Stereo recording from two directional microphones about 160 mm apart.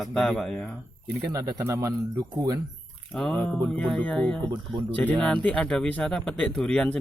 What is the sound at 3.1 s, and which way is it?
Speech, 5° left (ahead or behind).